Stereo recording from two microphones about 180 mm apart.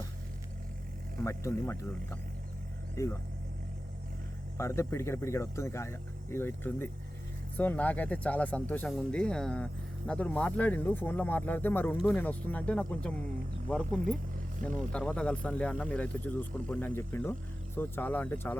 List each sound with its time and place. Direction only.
1.2 s speech: 15° left (ahead or behind)
4.5 s speech: 15° left (ahead or behind)